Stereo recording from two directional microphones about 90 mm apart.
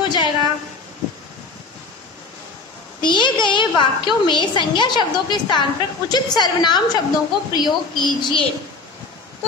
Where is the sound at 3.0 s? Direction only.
60° left (ahead or behind).